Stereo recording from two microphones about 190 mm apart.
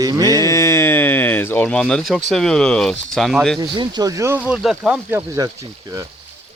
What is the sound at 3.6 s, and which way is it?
Speech, 25° right (ahead or behind).